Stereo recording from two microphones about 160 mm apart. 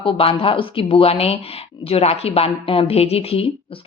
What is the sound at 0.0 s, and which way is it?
A woman's voice, 35° left (ahead or behind).